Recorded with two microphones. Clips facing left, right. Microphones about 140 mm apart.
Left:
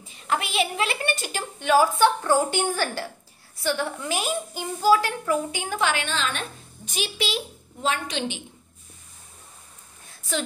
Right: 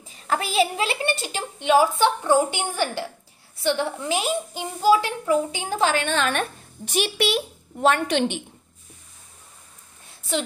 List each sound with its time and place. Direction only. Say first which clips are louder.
0.1 s a woman's voice: right 2 dB; 35° right (ahead or behind); by 8.4 s 60° right (ahead or behind)